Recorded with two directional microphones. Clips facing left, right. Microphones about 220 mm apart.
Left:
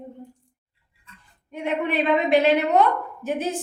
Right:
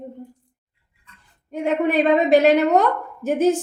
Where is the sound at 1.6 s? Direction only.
45° right (ahead or behind).